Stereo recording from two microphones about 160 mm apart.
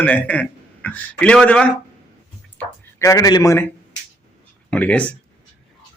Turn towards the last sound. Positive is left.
turn(degrees=10)  # may be behind; listen again after turning